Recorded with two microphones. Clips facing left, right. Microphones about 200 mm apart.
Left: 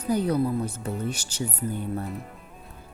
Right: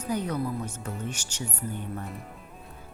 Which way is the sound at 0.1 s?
35° left (ahead or behind).